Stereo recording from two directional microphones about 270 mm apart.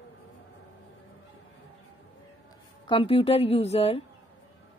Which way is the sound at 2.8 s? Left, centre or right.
Centre.